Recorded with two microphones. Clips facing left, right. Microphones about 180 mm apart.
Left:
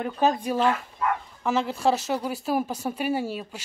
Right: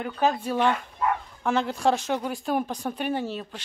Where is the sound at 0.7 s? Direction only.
Centre (ahead or behind).